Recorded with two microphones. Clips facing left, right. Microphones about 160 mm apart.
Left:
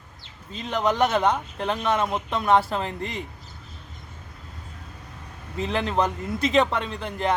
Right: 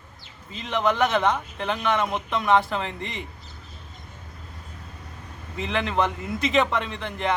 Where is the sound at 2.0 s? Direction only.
5° left (ahead or behind).